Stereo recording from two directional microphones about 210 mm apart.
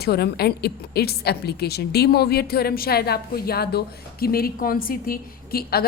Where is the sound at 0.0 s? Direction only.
50° left (ahead or behind).